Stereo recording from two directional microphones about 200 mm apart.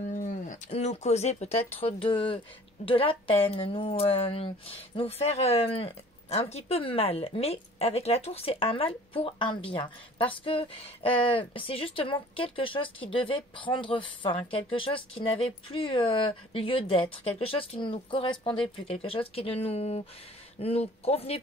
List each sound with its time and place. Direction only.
0.0 s speech: 40° left (ahead or behind)